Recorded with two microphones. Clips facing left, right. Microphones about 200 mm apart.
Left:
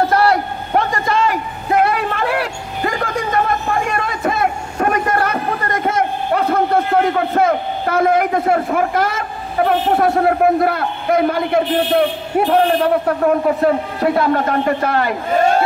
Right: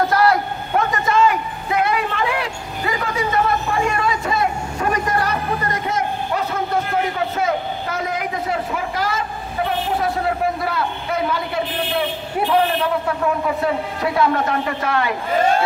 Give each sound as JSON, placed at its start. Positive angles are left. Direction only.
{"t": 0.1, "sound": "a sound", "side_deg": 30}
{"t": 1.7, "sound": "vehicle", "side_deg": 50}
{"t": 14.0, "sound": "a man's voice", "side_deg": 45}